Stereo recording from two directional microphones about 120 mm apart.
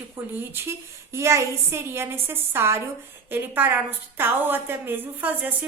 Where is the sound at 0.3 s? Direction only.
20° right (ahead or behind).